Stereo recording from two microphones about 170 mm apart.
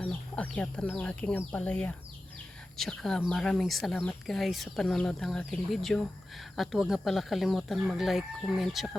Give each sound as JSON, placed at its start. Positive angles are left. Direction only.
{"t": 0.0, "sound": "speech", "side_deg": 10}